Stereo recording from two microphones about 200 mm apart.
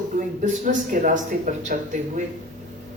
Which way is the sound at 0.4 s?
40° right (ahead or behind).